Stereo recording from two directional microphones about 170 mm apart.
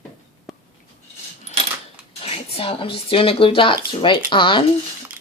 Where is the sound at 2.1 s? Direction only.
35° left (ahead or behind).